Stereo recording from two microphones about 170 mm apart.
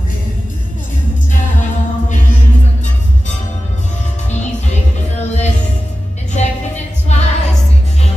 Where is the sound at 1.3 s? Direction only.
50° left (ahead or behind).